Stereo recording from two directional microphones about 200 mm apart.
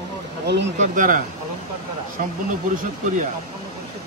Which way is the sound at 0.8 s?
40° right (ahead or behind).